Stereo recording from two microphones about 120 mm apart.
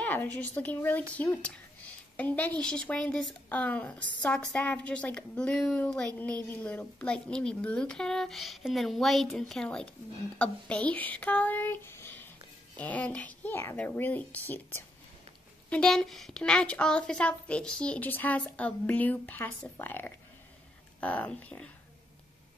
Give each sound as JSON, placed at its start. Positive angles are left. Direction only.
{"t": 0.0, "sound": "a woman's voice", "side_deg": 15}
{"t": 15.7, "sound": "a woman's voice", "side_deg": 5}